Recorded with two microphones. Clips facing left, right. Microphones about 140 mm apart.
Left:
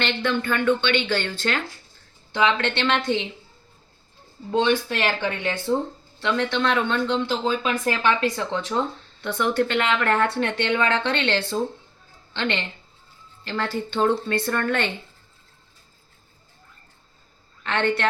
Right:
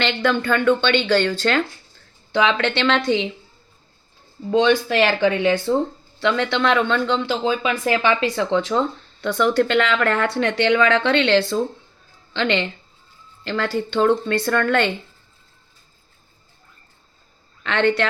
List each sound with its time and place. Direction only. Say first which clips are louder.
0.0 s speech: right 4 dB; 90° right
4.5 s speech: right 5 dB; 90° right
17.6 s a woman's voice: right 4 dB; 90° right